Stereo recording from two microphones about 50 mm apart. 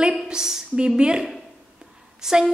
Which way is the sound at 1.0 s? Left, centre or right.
Centre.